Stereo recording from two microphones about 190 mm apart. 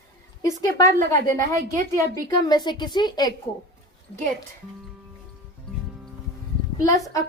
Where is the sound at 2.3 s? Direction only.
20° left (ahead or behind).